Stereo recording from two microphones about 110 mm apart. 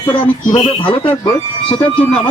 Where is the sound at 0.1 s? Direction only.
50° left (ahead or behind).